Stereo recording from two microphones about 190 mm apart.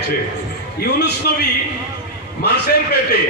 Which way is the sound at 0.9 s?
60° left (ahead or behind).